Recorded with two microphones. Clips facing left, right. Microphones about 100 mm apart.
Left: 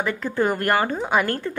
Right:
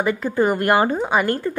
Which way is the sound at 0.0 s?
10° right (ahead or behind).